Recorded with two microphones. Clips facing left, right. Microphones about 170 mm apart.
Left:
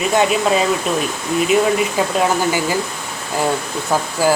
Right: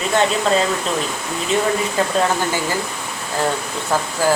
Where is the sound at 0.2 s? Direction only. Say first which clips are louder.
Left 1 dB; 10° left (ahead or behind).